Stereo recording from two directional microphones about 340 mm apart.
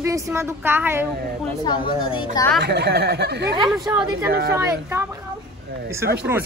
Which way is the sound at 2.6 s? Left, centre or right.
Right.